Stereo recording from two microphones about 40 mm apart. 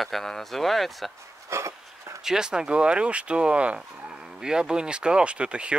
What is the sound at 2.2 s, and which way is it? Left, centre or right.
Speech, centre.